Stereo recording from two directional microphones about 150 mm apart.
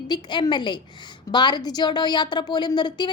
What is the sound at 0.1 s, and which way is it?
A woman's voice, 30° left (ahead or behind).